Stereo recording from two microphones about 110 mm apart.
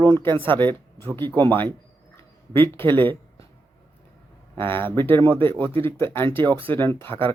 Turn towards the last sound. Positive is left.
turn(degrees=20)  # may be behind; listen again after turning